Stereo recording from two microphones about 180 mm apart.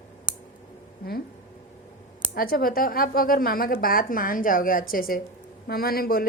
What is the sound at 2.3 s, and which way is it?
A woman's voice, 55° left (ahead or behind).